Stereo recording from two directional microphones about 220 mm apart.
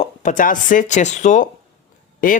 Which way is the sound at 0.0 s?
35° left (ahead or behind).